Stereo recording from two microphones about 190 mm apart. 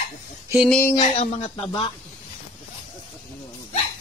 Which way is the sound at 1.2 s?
35° left (ahead or behind).